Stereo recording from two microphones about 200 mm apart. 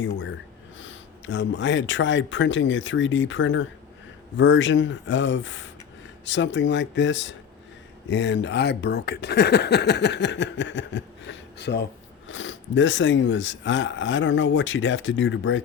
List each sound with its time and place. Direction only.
0.8 s speech: 65° left (ahead or behind)
12.3 s speech: 70° left (ahead or behind)